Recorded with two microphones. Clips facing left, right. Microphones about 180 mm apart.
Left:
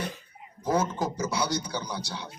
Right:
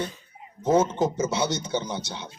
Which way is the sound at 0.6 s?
25° right (ahead or behind).